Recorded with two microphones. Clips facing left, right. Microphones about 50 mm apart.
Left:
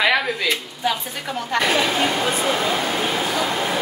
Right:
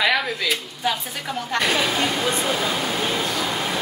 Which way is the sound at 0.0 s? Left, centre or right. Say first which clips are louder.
Left 2 dB; centre.